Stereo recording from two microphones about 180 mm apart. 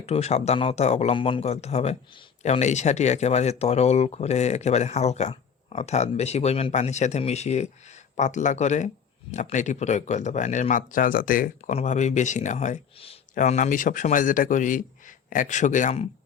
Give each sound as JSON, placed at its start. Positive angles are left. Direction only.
{"t": 0.0, "sound": "a man's voice", "side_deg": 35}